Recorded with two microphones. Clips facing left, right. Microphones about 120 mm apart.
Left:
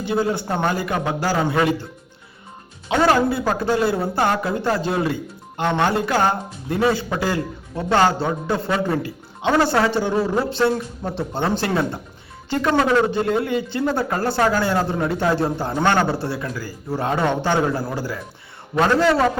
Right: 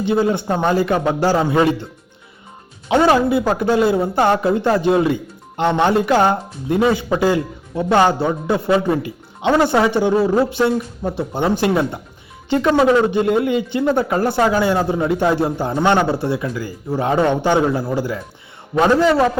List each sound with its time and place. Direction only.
0.0 s a man's voice: 20° right (ahead or behind)
2.9 s a man's voice: 20° right (ahead or behind)